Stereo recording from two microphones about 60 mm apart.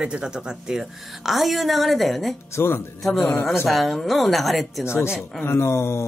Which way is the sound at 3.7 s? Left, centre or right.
Centre.